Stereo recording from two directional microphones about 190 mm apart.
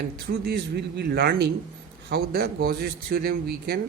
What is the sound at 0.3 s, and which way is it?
Speech, 55° right (ahead or behind).